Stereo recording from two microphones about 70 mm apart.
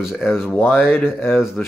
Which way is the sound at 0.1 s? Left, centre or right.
Left.